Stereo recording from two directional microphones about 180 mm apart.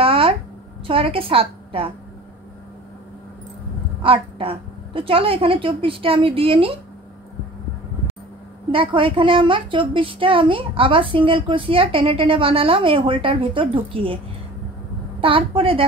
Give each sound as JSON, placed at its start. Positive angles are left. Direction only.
{"t": 0.0, "sound": "a sound", "side_deg": -30}
{"t": 0.8, "sound": "a woman's voice", "side_deg": -30}
{"t": 4.0, "sound": "a woman's voice", "side_deg": -30}
{"t": 8.7, "sound": "a woman's voice", "side_deg": -30}